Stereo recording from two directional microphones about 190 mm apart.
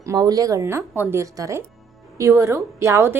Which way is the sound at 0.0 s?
15° right (ahead or behind).